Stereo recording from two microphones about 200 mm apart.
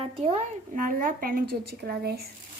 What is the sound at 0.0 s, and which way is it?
Speech, 30° right (ahead or behind).